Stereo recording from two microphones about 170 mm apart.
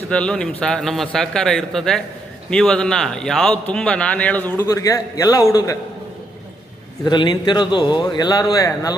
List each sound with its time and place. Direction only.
0.1 s a man's voice: 5° left (ahead or behind)
7.0 s a man's voice: 25° left (ahead or behind)